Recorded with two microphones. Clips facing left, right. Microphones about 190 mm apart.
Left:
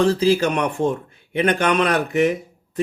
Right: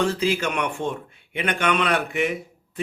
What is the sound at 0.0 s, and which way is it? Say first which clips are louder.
A man's voice: left 6 dB; 35° left (ahead or behind).